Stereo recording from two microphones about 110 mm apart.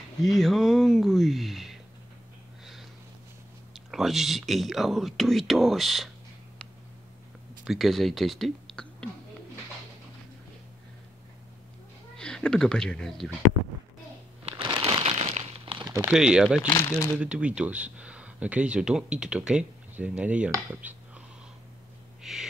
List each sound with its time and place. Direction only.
0.2 s speech: centre (ahead or behind)
2.6 s sniff: centre (ahead or behind)
3.7 s speech: centre (ahead or behind)
7.6 s speech: centre (ahead or behind)
12.2 s speech: 5° left (ahead or behind)
14.4 s shuffling cards: 55° right (ahead or behind)
15.0 s crumpling: 80° right
15.6 s a sound: 50° right (ahead or behind)
16.1 s speech: 5° right (ahead or behind)
16.7 s speech: 30° left (ahead or behind)
17.2 s speech: 10° right (ahead or behind)
22.2 s owl: 5° right (ahead or behind)